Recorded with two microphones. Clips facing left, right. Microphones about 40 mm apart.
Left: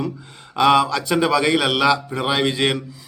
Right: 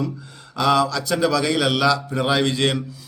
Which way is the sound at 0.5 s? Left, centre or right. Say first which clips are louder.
Left 3 dB; left.